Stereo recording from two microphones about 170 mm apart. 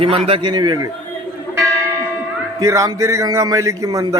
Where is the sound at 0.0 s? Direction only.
35° right (ahead or behind).